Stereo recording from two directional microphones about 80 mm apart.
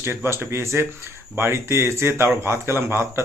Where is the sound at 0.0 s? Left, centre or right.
Right.